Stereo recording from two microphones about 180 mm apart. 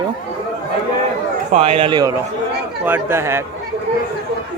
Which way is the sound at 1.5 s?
35° right (ahead or behind).